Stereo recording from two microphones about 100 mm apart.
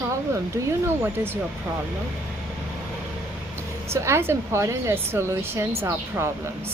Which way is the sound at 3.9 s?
25° right (ahead or behind).